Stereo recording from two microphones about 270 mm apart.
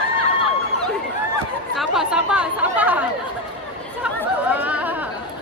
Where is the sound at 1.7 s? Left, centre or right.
Centre.